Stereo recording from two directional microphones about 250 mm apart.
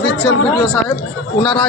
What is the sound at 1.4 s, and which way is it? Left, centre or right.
Speech, centre.